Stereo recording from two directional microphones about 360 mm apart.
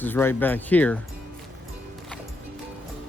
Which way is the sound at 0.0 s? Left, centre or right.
Centre.